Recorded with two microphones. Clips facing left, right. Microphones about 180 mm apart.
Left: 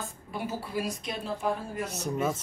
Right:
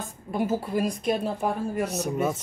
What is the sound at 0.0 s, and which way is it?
A woman's voice, 45° right (ahead or behind).